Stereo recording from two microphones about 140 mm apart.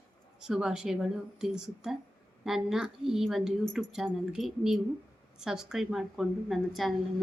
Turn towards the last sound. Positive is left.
turn(degrees=0)  # may be behind; listen again after turning